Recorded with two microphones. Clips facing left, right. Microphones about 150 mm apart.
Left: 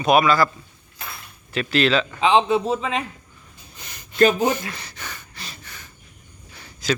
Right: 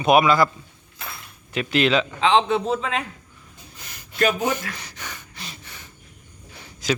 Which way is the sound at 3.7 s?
5° right (ahead or behind).